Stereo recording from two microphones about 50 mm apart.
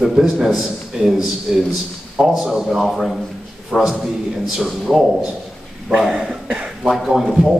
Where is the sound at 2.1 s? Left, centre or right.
Centre.